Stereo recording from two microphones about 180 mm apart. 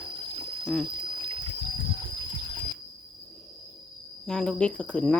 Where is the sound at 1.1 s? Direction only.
30° right (ahead or behind).